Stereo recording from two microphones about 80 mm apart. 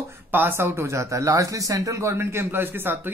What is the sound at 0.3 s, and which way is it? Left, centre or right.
Speech, right.